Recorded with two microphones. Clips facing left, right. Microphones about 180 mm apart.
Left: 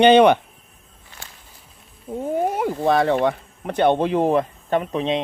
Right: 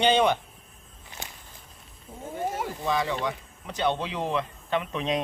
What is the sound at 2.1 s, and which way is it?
Speech, 70° left (ahead or behind).